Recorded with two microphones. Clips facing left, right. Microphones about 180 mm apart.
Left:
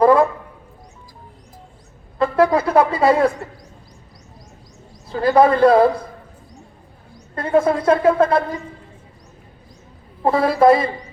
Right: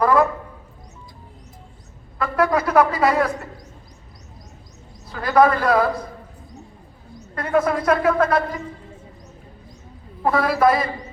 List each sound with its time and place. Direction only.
0.0 s a sound: 25° left (ahead or behind)
2.1 s a woman's voice: 30° left (ahead or behind)
5.1 s a woman's voice: 30° left (ahead or behind)
7.3 s a woman's voice: 30° left (ahead or behind)
10.2 s a woman's voice: 25° left (ahead or behind)